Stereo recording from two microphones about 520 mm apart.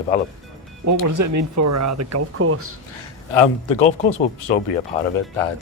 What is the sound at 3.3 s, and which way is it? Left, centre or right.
Speech, left.